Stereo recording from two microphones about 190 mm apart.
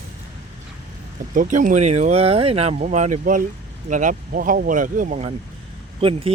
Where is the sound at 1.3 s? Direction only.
45° right (ahead or behind).